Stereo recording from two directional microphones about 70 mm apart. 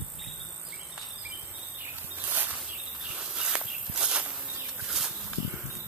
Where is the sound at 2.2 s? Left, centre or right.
Right.